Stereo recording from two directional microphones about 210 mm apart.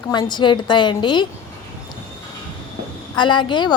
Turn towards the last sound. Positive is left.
turn(degrees=20)  # may be behind; listen again after turning